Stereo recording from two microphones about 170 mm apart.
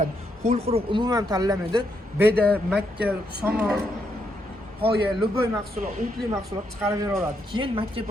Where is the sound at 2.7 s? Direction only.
10° right (ahead or behind).